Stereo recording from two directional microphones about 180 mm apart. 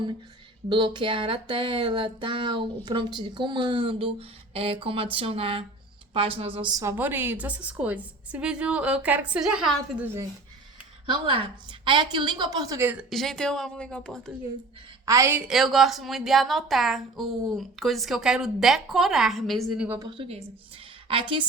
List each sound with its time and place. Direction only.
0.7 s a woman's voice: 25° right (ahead or behind)
6.7 s a woman's voice: 15° right (ahead or behind)
11.0 s a woman's voice: 30° right (ahead or behind); by 14.3 s 5° left (ahead or behind)
15.0 s a woman's voice: 15° right (ahead or behind)
19.9 s speech: 20° right (ahead or behind)